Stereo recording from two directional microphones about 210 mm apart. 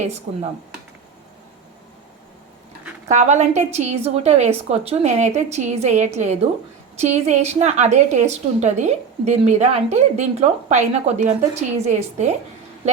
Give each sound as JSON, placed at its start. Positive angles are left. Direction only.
{"t": 0.3, "sound": "a woman's voice", "side_deg": -35}
{"t": 3.1, "sound": "a woman's voice", "side_deg": -35}